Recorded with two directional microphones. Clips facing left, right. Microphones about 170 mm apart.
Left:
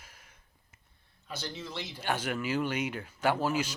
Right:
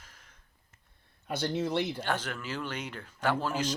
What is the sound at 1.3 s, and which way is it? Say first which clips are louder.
Speech: right 9 dB; 55° right (ahead or behind).